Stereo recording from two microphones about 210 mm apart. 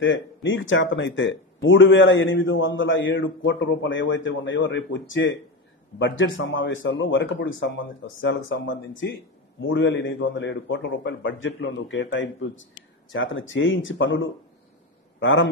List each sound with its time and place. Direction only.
0.0 s speech: 60° left (ahead or behind)
5.9 s a man's voice: 65° left (ahead or behind)